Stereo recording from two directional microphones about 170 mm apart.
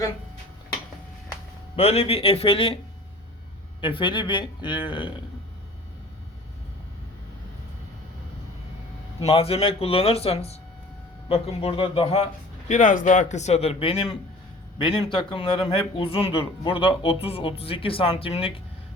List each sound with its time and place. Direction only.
1.7 s a man's voice: 35° left (ahead or behind)
3.8 s speech: 30° left (ahead or behind)
9.2 s a man's voice: 35° left (ahead or behind)